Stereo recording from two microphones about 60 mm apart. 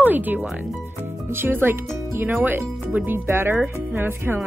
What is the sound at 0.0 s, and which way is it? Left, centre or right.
Speech, right.